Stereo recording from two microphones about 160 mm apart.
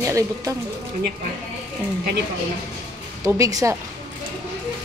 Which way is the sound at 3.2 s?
20° right (ahead or behind).